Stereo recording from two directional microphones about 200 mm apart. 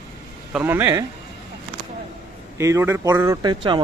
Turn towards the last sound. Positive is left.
turn(degrees=-20)  # may be behind; listen again after turning